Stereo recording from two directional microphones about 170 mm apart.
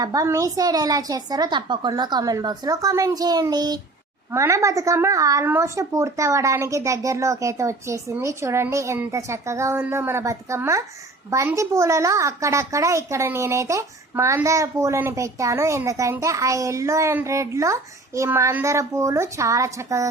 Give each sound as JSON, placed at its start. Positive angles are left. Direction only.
{"t": 0.0, "sound": "a woman's voice", "side_deg": -20}